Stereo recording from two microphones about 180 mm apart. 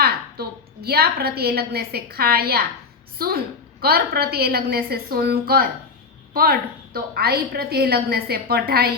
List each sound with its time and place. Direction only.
0.0 s a woman's voice: 60° right (ahead or behind)